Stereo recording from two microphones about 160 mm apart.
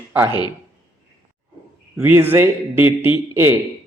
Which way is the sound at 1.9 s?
15° right (ahead or behind).